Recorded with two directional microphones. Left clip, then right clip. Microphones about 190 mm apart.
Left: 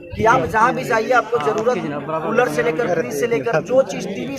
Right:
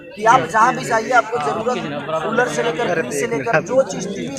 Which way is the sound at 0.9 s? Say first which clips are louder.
Right 1 dB; 30° left (ahead or behind).